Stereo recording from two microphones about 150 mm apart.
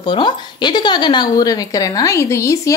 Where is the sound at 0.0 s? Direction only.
30° left (ahead or behind).